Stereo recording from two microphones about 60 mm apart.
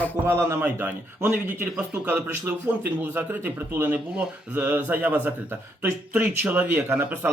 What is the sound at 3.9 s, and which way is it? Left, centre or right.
Speech, right.